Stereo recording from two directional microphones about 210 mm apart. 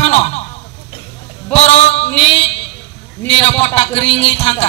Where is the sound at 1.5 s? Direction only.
30° left (ahead or behind).